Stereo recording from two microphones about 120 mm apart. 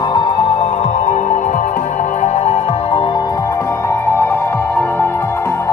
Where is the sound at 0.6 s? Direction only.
70° left (ahead or behind).